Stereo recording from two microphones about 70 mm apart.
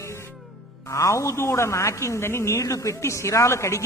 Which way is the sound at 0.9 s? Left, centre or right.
Left.